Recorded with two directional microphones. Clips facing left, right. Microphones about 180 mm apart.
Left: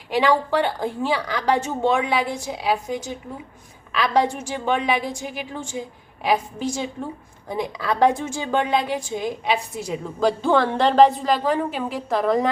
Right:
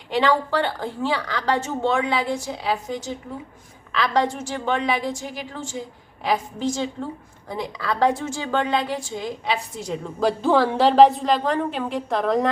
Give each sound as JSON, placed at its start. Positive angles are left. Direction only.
{"t": 0.1, "sound": "a woman's voice", "side_deg": 10}